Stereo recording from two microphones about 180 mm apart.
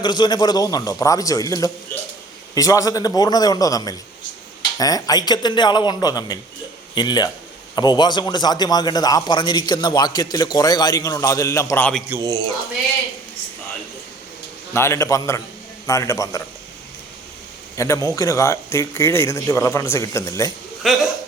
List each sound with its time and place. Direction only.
0.0 s a man's voice: 25° left (ahead or behind)
12.0 s a man's voice: 15° right (ahead or behind)
14.7 s speech: 15° left (ahead or behind)
17.7 s a man's voice: 15° left (ahead or behind)
20.8 s speech: centre (ahead or behind)